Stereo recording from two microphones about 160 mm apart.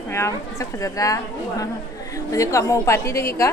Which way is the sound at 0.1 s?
20° left (ahead or behind).